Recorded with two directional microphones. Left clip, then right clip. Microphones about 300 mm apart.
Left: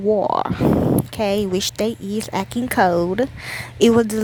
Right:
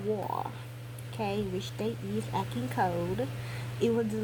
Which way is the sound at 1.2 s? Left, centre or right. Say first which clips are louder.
Left 10 dB; left.